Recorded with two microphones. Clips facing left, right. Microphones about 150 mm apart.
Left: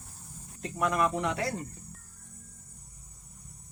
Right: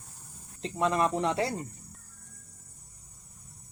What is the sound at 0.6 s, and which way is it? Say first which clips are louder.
Speech: right 1 dB; 25° right (ahead or behind).